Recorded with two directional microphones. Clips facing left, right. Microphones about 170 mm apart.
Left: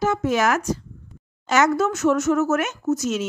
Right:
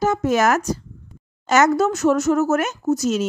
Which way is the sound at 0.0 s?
40° right (ahead or behind).